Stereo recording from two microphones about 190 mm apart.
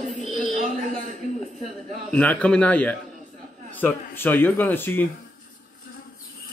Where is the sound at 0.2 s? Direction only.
40° left (ahead or behind).